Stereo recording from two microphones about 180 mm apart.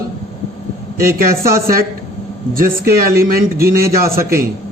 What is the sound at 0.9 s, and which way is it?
Speech, 55° right (ahead or behind).